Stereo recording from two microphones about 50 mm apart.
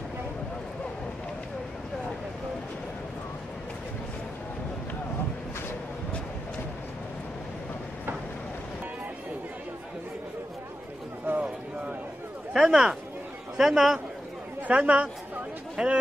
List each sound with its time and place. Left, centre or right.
11.3 s a sound: right
12.5 s a man's voice: centre
14.7 s speech: right
15.7 s chatter: centre